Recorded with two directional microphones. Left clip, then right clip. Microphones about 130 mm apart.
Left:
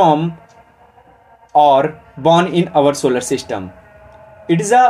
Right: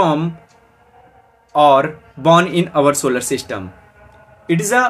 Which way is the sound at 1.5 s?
20° right (ahead or behind).